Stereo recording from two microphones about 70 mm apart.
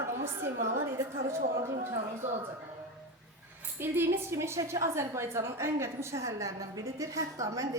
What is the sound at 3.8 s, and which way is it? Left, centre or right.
A woman's voice, right.